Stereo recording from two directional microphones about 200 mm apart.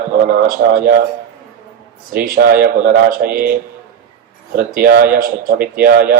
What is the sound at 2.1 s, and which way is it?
Speech, 50° right (ahead or behind).